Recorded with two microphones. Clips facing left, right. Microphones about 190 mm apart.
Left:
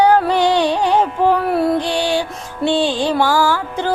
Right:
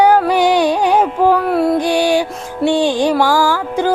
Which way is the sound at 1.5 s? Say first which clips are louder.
Right 2 dB; centre (ahead or behind).